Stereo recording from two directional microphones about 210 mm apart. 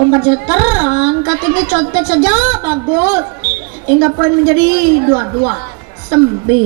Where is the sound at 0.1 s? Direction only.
15° right (ahead or behind).